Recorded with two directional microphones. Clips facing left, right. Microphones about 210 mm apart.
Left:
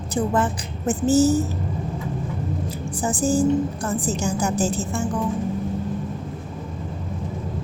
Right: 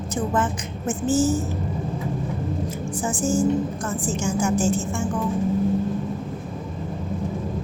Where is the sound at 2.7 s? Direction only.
35° left (ahead or behind).